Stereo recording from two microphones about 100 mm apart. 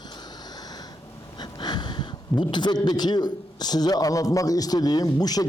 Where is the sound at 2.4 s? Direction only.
50° left (ahead or behind).